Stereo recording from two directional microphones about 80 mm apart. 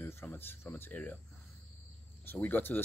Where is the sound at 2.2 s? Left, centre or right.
Left.